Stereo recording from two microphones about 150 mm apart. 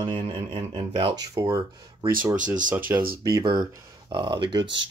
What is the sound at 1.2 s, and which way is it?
Speech, 20° right (ahead or behind).